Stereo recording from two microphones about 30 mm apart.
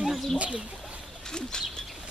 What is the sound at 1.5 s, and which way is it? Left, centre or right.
Bird, left.